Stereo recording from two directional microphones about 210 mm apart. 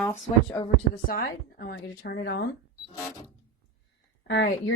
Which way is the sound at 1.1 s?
50° left (ahead or behind).